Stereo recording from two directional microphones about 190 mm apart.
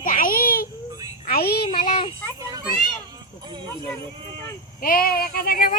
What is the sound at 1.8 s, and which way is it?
Speech, 30° left (ahead or behind).